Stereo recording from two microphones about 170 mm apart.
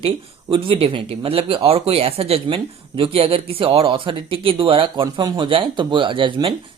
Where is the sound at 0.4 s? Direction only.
30° right (ahead or behind).